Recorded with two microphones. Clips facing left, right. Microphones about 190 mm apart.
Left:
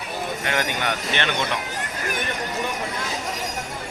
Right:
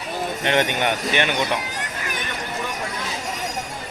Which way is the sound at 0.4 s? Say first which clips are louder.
Right 6 dB; 25° right (ahead or behind).